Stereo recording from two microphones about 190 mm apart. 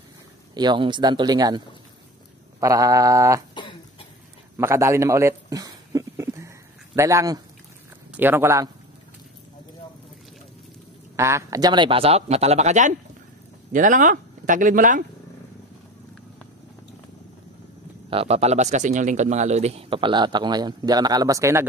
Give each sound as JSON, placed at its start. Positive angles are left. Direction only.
{"t": 0.6, "sound": "speech", "side_deg": -25}
{"t": 2.6, "sound": "a sound", "side_deg": -15}
{"t": 4.6, "sound": "a sound", "side_deg": -15}
{"t": 8.1, "sound": "speech", "side_deg": -10}
{"t": 11.1, "sound": "a man's voice", "side_deg": -15}
{"t": 18.1, "sound": "speech", "side_deg": -30}